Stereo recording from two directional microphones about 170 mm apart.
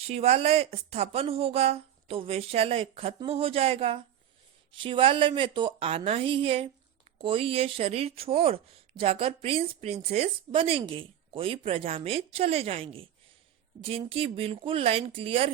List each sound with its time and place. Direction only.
0.1 s speech: 40° right (ahead or behind)